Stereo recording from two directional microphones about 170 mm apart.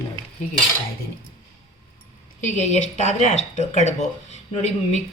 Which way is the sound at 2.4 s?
45° left (ahead or behind).